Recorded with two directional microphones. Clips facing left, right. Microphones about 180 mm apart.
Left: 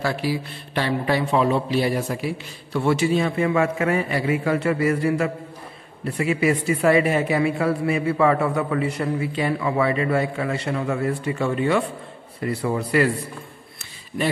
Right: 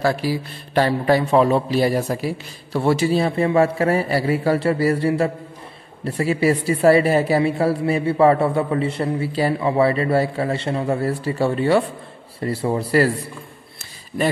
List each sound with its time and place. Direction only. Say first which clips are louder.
0.0 s speech: right 3 dB; 40° right (ahead or behind)
14.2 s speech: right 3 dB; 35° right (ahead or behind)